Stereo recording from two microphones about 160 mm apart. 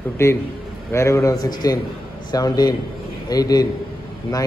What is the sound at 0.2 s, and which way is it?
A man's voice, 15° left (ahead or behind).